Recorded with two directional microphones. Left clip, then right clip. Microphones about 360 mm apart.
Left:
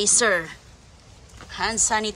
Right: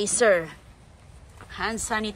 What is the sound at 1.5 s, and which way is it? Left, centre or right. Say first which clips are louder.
Speech: left 5 dB; centre.